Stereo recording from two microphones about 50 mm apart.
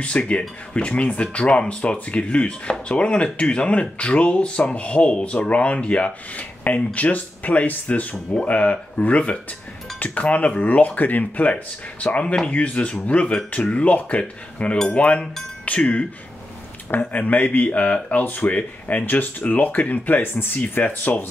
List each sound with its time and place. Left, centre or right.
0.0 s speech: left